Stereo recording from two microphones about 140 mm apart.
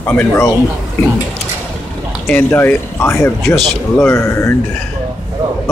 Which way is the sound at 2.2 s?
15° left (ahead or behind).